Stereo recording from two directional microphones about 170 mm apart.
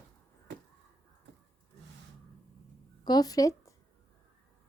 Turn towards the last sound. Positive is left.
turn(degrees=20)  # may be behind; listen again after turning